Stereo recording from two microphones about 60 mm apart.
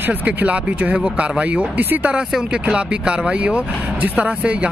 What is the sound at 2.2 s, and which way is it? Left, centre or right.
Speech, centre.